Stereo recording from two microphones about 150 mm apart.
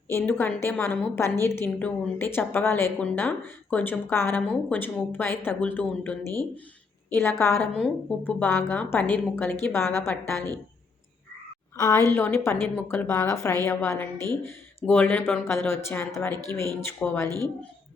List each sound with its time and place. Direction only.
0.1 s a woman's voice: 15° left (ahead or behind)
11.8 s a woman's voice: 20° left (ahead or behind)